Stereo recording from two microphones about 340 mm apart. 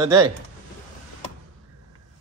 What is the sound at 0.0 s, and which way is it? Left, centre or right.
Speech, centre.